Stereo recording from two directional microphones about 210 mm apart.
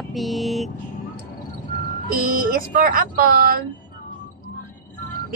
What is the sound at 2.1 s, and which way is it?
A woman's voice, 45° right (ahead or behind).